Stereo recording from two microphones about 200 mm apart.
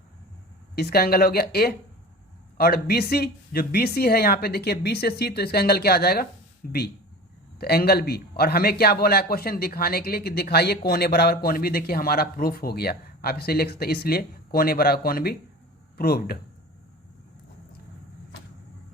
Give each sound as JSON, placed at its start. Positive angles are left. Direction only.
{"t": 0.8, "sound": "speech", "side_deg": 50}